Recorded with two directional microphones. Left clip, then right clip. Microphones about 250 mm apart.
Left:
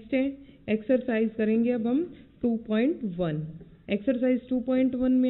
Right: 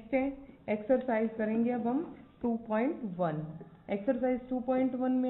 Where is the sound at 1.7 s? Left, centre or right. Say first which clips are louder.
Left 5 dB; left.